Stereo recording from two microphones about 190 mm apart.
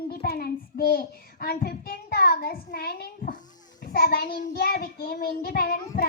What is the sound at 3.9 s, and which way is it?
A child's voice, 55° left (ahead or behind).